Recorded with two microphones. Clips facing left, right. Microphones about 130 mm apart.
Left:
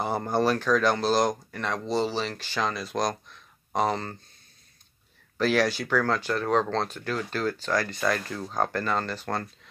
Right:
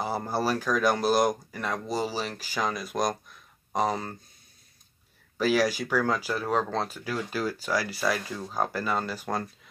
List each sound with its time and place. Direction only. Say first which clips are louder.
0.0 s speech: left 3 dB; 5° right (ahead or behind)
5.4 s speech: even; 5° right (ahead or behind)